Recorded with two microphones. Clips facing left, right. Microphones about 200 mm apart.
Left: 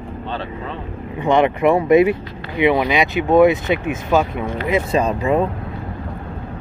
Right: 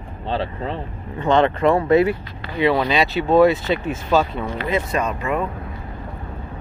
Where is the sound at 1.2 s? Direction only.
15° left (ahead or behind).